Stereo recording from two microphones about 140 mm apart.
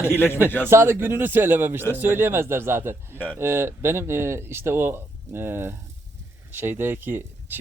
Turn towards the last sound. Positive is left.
turn(degrees=-15)  # may be behind; listen again after turning